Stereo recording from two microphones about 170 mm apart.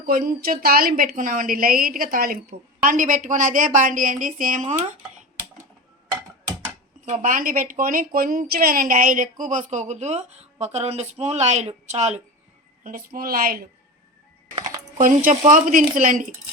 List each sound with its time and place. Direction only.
0.0 s a woman's voice: 55° right (ahead or behind)
7.0 s a woman's voice: 50° right (ahead or behind)
12.8 s a woman's voice: 55° right (ahead or behind)